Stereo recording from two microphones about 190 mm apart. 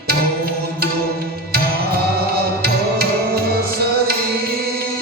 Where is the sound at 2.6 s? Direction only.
55° right (ahead or behind).